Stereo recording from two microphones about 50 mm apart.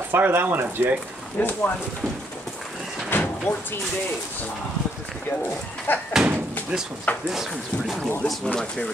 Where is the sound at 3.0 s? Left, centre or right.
Left.